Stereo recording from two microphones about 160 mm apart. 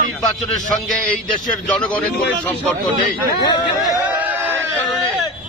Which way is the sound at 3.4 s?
25° left (ahead or behind).